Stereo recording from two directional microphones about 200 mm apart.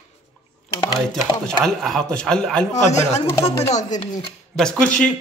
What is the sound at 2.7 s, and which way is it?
Speech, 35° left (ahead or behind).